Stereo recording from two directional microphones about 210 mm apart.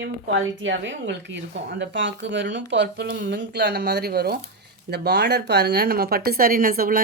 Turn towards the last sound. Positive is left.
turn(degrees=-45)  # may be behind; listen again after turning